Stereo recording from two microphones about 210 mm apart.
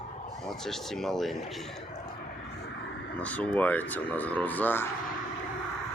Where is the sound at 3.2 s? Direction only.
5° left (ahead or behind).